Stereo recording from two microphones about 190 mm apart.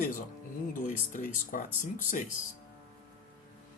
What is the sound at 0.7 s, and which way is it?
Speech, 45° left (ahead or behind).